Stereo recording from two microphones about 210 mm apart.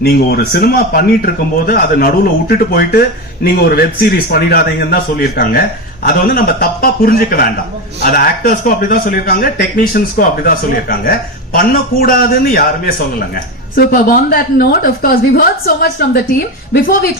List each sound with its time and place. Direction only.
0.0 s speech: 50° left (ahead or behind)